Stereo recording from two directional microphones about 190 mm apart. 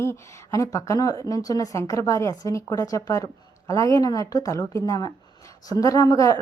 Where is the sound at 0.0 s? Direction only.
15° left (ahead or behind).